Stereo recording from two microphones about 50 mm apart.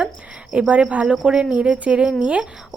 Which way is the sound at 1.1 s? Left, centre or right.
Centre.